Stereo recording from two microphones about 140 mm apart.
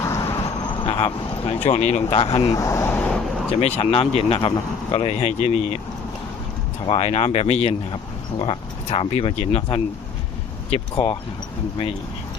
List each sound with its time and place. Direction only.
0.0 s a sound: 20° left (ahead or behind)
0.9 s speech: 40° left (ahead or behind)
1.6 s speech: 55° left (ahead or behind)
2.1 s speech: 40° left (ahead or behind)
2.4 s speech: 25° left (ahead or behind)
3.8 s speech: 45° left (ahead or behind)
6.8 s speech: 45° left (ahead or behind)
10.9 s speech: 35° left (ahead or behind)